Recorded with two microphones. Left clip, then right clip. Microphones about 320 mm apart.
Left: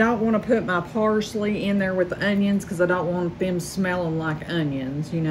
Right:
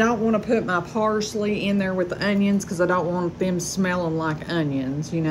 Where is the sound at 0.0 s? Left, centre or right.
Centre.